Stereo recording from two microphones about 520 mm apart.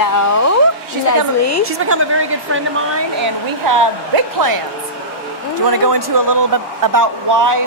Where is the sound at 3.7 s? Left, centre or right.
Right.